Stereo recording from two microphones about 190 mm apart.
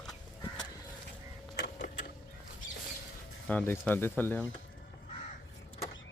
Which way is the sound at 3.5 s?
10° left (ahead or behind).